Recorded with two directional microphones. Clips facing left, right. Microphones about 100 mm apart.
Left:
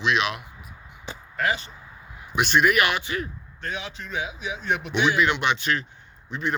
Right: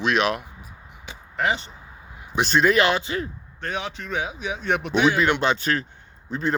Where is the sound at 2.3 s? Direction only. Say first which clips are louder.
Right 1 dB; 35° right (ahead or behind).